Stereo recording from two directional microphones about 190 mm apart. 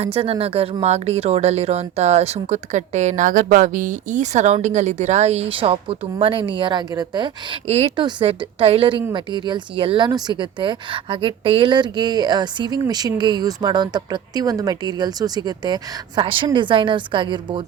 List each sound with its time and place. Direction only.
0.0 s speech: 30° right (ahead or behind)